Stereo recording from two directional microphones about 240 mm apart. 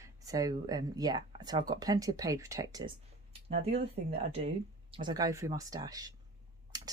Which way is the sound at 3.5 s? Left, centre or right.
Right.